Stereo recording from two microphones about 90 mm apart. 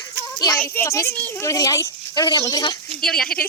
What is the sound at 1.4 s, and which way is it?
Speech, 40° left (ahead or behind).